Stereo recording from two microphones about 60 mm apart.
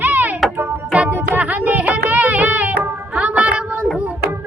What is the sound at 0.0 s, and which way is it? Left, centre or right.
Music, right.